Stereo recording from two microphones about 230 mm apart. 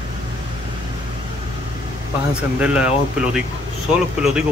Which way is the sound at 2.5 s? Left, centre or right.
Centre.